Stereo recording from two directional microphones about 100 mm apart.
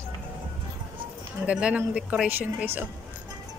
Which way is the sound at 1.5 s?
10° right (ahead or behind).